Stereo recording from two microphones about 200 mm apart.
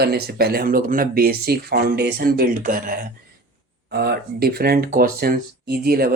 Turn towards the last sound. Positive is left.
turn(degrees=-50)  # may be behind; listen again after turning